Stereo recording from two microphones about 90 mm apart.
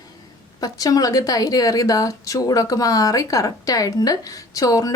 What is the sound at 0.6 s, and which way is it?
A woman's voice, 45° left (ahead or behind).